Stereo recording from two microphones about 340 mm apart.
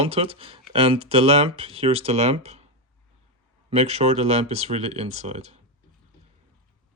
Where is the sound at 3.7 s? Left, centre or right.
Centre.